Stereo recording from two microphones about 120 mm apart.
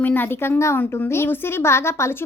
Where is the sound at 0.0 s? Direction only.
15° left (ahead or behind).